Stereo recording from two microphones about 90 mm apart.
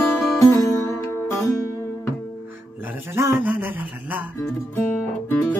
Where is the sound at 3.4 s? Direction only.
20° right (ahead or behind).